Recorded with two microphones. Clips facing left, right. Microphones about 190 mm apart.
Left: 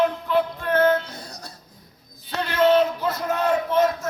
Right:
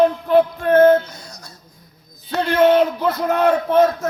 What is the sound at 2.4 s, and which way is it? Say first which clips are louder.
A man's voice: right 4 dB; 55° right (ahead or behind).